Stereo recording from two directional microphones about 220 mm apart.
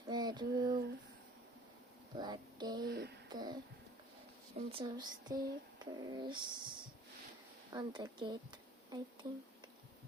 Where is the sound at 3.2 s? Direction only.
20° right (ahead or behind).